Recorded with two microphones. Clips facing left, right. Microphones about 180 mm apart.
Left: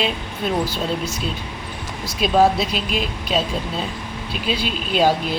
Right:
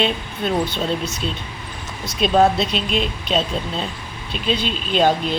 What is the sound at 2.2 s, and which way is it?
A woman's voice, 5° left (ahead or behind).